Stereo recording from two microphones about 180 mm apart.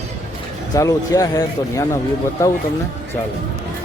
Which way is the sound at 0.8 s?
20° left (ahead or behind).